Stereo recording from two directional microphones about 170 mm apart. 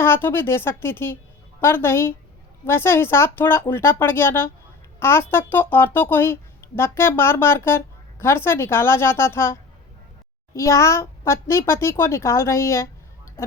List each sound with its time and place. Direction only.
0.0 s speech: 15° left (ahead or behind)